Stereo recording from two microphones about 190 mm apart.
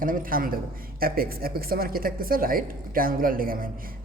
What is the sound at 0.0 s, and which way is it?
A man's voice, 45° right (ahead or behind).